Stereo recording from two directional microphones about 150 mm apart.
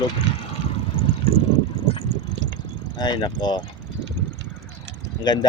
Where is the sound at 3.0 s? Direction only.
30° left (ahead or behind).